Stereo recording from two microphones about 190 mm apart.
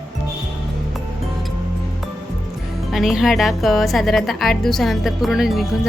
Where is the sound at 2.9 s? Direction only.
Centre (ahead or behind).